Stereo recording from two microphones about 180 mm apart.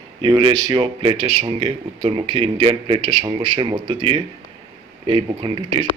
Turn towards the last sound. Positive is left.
turn(degrees=-25)  # may be behind; listen again after turning